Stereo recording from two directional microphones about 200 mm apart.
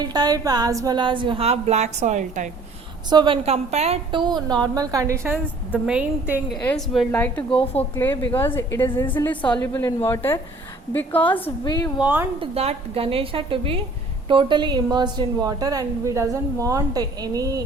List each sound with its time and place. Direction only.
0.0 s a woman's voice: 20° right (ahead or behind); by 2.5 s 40° right (ahead or behind)
3.1 s a woman's voice: 25° right (ahead or behind); by 6.6 s 5° right (ahead or behind)
6.6 s a woman's voice: 5° left (ahead or behind)
7.5 s a woman's voice: 30° left (ahead or behind)
7.9 s a woman's voice: 10° left (ahead or behind)
11.4 s a woman's voice: 20° left (ahead or behind)
11.9 s a woman's voice: 10° right (ahead or behind)
12.4 s a woman's voice: 30° right (ahead or behind)